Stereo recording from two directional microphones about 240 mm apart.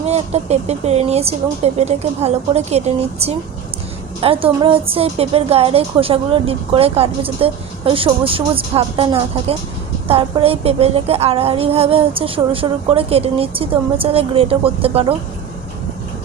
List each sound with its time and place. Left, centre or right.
0.0 s a woman's voice: right